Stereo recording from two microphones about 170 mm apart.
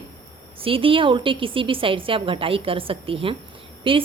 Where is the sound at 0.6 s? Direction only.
30° right (ahead or behind).